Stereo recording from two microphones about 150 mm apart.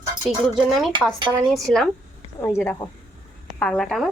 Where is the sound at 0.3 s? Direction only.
Centre (ahead or behind).